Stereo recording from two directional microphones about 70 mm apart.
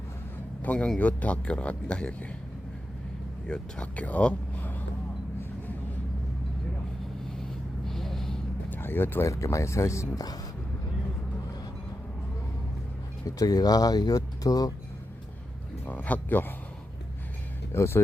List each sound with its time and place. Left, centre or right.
0.6 s a man's voice: left
3.4 s speech: centre
7.9 s a sound: centre
8.7 s speech: left
9.2 s speech: left
13.2 s speech: left
15.8 s a sound: left
17.7 s speech: left